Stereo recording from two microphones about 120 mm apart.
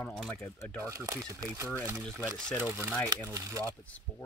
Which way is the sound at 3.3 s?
25° right (ahead or behind).